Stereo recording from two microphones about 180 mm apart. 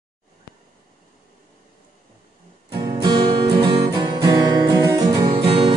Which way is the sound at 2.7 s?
25° right (ahead or behind).